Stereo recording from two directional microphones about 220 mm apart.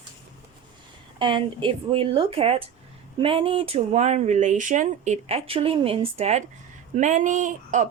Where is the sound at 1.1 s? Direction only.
20° right (ahead or behind).